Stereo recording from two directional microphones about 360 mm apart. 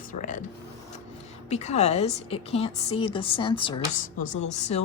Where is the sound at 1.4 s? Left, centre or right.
Centre.